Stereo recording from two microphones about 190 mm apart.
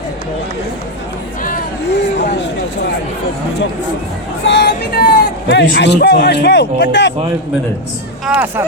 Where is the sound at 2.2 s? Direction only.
65° left (ahead or behind).